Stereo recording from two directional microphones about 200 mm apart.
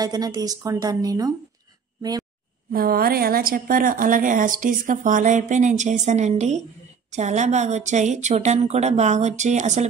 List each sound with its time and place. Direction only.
0.0 s a woman's voice: 20° right (ahead or behind)
2.0 s a sound: 20° right (ahead or behind)
2.7 s a woman's voice: 50° right (ahead or behind)